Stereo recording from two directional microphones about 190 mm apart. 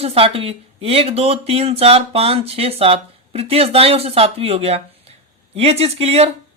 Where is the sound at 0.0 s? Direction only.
30° right (ahead or behind).